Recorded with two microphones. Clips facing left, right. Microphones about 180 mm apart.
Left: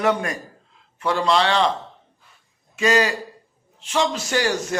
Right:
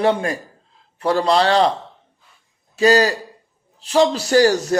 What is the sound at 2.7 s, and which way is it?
A man's voice, 35° right (ahead or behind).